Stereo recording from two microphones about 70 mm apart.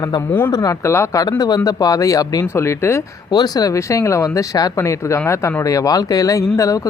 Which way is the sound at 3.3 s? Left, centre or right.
Left.